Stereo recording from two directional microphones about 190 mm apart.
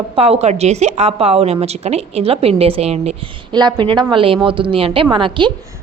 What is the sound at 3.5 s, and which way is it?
A woman's voice, 25° right (ahead or behind).